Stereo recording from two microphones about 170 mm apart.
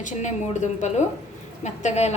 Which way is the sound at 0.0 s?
45° left (ahead or behind).